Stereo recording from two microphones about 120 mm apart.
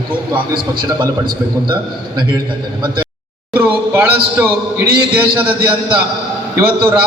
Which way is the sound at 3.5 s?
15° right (ahead or behind).